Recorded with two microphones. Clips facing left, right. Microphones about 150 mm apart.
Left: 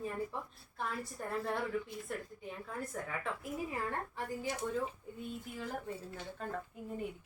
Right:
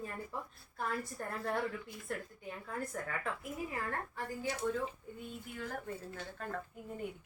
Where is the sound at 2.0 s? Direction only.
Centre (ahead or behind).